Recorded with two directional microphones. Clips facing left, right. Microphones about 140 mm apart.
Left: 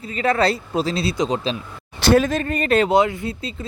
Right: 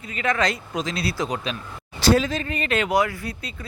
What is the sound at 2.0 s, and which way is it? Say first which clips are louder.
Speech: left 3 dB; 55° left (ahead or behind).